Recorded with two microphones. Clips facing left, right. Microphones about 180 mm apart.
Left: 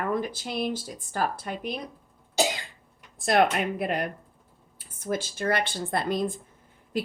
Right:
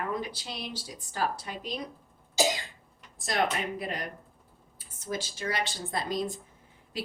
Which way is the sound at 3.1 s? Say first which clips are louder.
Left 7 dB; 60° left (ahead or behind).